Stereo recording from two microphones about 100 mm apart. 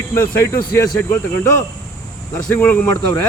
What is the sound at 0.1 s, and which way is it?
Speech, 25° left (ahead or behind).